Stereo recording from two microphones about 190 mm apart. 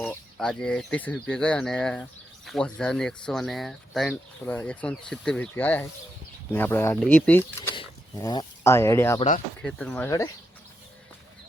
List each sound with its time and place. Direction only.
0.1 s speech: 5° left (ahead or behind)
7.8 s speech: 20° left (ahead or behind); by 10.1 s 5° left (ahead or behind)
10.1 s speech: 15° left (ahead or behind)